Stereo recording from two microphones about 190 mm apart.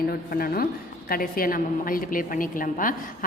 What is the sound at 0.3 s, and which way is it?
A woman's voice, 50° left (ahead or behind).